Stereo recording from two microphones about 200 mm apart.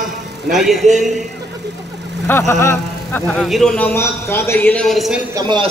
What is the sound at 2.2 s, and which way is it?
A man's voice, 10° left (ahead or behind).